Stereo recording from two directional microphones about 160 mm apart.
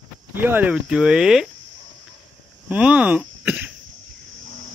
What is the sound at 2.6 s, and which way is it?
Speech, 10° right (ahead or behind).